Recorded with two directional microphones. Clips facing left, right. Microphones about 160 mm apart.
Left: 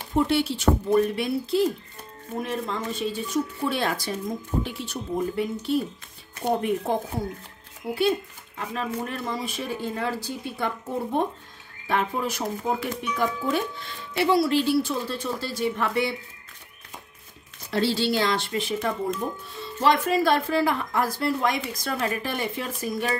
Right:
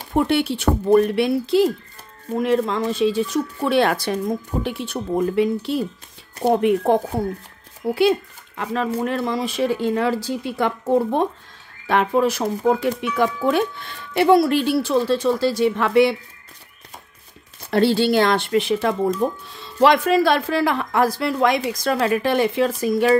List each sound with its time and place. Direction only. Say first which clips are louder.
0.1 s speech: right 4 dB; 60° right (ahead or behind); by 5.8 s 90° right
6.4 s speech: right 7 dB; 80° right
8.5 s speech: right 7 dB; 90° right
17.6 s speech: right 7 dB; 60° right (ahead or behind)
19.2 s speech: right 8 dB; 90° right